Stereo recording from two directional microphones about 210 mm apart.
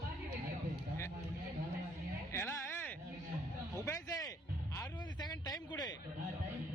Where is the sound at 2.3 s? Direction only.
10° left (ahead or behind).